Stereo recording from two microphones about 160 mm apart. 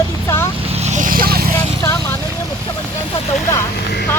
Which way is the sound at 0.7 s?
45° right (ahead or behind).